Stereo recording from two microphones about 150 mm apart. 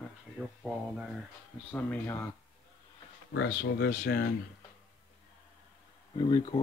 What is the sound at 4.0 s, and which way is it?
Speech, 90° left.